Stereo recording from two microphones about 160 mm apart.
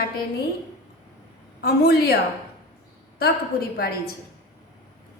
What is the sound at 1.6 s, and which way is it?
Speech, 85° left.